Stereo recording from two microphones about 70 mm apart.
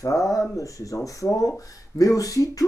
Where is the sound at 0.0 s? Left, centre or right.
Left.